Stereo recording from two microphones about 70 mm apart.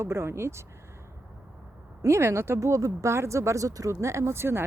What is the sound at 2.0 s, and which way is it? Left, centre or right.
Speech, right.